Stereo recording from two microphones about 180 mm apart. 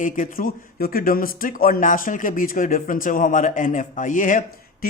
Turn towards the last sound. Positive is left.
turn(degrees=45)  # may be behind; listen again after turning